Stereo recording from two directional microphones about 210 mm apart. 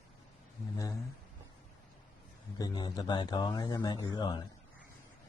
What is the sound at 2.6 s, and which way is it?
Speech, 20° left (ahead or behind).